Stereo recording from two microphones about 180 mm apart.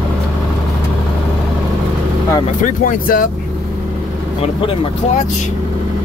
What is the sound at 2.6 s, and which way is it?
Speech, 50° left (ahead or behind).